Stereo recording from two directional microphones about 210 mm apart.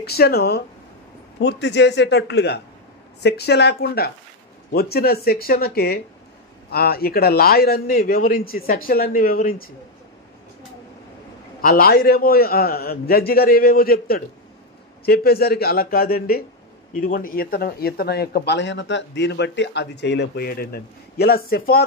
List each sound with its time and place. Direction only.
0.0 s speech: 50° left (ahead or behind)
11.6 s speech: 45° left (ahead or behind)